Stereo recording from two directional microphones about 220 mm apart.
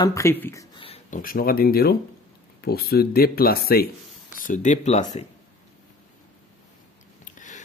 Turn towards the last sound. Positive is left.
turn(degrees=35)  # may be behind; listen again after turning